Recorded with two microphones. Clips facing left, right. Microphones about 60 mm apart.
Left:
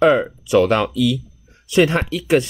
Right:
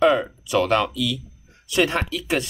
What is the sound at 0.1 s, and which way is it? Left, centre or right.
Speech, left.